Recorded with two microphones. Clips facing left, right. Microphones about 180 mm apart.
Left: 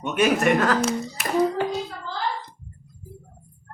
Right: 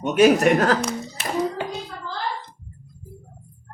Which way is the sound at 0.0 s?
35° right (ahead or behind).